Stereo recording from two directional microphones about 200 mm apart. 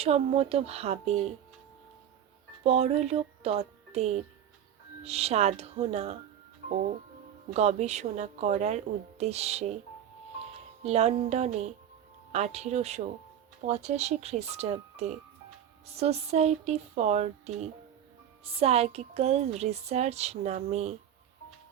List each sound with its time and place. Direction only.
0.0 s speech: 30° right (ahead or behind)
2.6 s music: 30° right (ahead or behind)
5.0 s speech: 30° right (ahead or behind)
7.5 s speech: 35° right (ahead or behind)
10.8 s speech: 30° right (ahead or behind)